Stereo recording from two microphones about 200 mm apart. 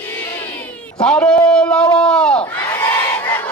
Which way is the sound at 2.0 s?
5° left (ahead or behind).